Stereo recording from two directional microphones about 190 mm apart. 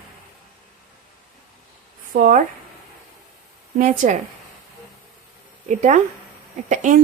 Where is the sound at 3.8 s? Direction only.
40° right (ahead or behind).